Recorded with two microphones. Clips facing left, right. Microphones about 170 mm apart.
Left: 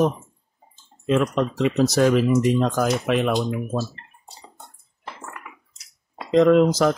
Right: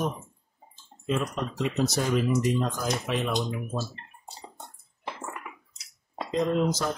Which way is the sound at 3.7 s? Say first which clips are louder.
Left 6 dB; 80° left.